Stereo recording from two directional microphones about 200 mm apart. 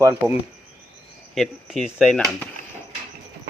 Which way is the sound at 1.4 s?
Centre (ahead or behind).